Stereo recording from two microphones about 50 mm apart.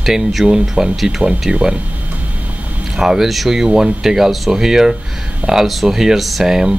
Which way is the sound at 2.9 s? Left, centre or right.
Centre.